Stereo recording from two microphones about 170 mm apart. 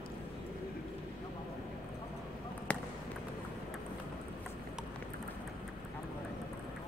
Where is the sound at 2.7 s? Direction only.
10° left (ahead or behind).